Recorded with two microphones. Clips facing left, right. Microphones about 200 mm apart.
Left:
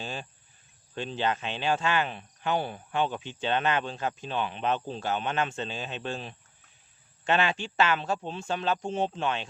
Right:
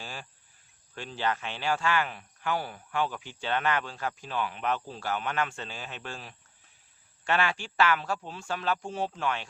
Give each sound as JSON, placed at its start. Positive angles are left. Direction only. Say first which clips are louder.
{"t": 0.0, "sound": "cricket", "louder": "left 5 dB", "side_deg": 20}
{"t": 0.9, "sound": "speech", "louder": "left 2 dB", "side_deg": 20}